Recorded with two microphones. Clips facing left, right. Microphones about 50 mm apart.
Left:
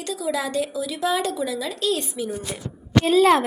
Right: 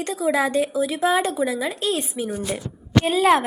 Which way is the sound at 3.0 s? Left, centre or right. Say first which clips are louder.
Left 2 dB; centre.